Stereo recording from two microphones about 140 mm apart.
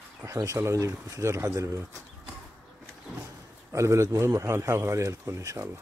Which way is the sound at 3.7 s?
20° right (ahead or behind).